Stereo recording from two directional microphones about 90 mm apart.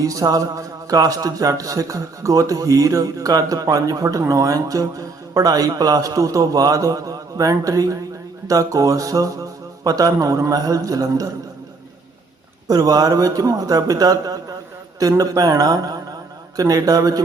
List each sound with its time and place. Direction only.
0.0 s a man's voice: 40° right (ahead or behind)
12.6 s a man's voice: 45° right (ahead or behind)